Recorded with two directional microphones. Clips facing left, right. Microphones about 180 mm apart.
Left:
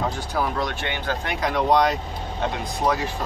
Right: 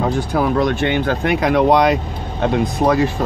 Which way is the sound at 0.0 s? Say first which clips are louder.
Right 8 dB; 55° right (ahead or behind).